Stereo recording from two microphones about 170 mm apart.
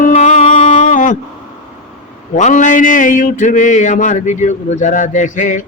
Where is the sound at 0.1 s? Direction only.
45° left (ahead or behind).